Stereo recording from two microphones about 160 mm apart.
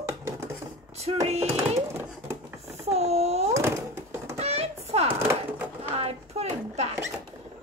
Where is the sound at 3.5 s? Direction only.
15° right (ahead or behind).